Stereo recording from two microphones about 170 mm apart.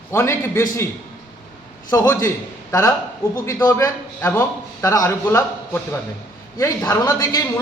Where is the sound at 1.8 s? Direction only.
20° left (ahead or behind).